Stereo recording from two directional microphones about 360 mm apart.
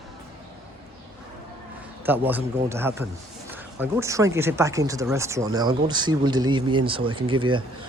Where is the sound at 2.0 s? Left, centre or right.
Centre.